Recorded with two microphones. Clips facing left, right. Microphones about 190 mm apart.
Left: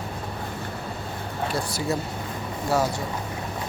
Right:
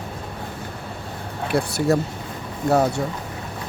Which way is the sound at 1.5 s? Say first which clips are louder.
Right 9 dB; 60° right (ahead or behind).